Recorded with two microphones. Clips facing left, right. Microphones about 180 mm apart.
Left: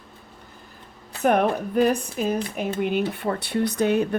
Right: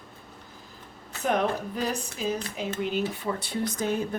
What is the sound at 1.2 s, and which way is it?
Speech, 55° left (ahead or behind).